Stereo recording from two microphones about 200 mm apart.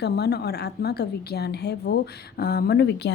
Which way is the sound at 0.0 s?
55° left (ahead or behind).